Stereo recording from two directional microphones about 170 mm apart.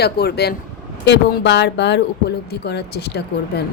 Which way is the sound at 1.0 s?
90° left.